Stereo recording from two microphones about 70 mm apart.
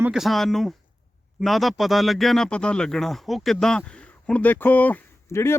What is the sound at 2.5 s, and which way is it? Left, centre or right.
Speech, centre.